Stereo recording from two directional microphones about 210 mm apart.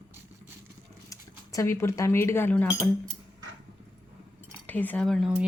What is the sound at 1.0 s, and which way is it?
Speech, 15° left (ahead or behind).